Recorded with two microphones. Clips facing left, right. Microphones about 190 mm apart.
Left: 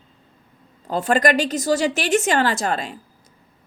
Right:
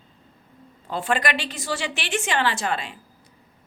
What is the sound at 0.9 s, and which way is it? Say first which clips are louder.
A woman's voice: left 6 dB; 40° left (ahead or behind).